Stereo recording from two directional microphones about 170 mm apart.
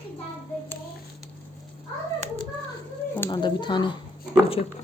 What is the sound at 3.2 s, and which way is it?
Speech, 25° left (ahead or behind).